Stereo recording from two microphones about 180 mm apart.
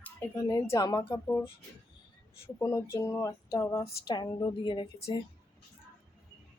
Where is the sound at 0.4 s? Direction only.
20° left (ahead or behind).